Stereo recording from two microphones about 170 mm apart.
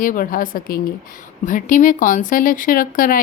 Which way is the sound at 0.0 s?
55° left (ahead or behind).